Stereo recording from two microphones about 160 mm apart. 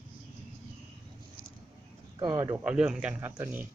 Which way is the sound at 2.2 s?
25° right (ahead or behind).